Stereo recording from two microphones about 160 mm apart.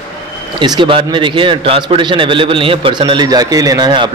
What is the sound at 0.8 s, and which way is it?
A man's voice, 30° right (ahead or behind).